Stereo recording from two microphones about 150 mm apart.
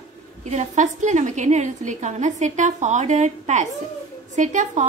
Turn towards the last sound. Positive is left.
turn(degrees=-55)  # may be behind; listen again after turning